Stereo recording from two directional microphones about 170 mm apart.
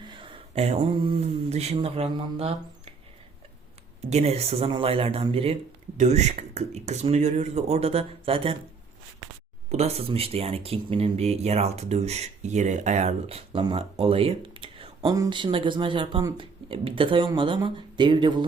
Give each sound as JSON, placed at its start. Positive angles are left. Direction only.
{"t": 0.1, "sound": "speech", "side_deg": -30}
{"t": 4.0, "sound": "speech", "side_deg": -40}
{"t": 9.6, "sound": "speech", "side_deg": -40}